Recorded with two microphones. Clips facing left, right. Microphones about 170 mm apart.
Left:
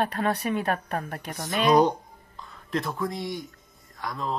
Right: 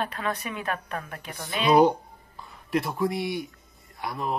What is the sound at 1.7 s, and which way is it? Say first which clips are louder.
Speech: right 2 dB; 10° right (ahead or behind).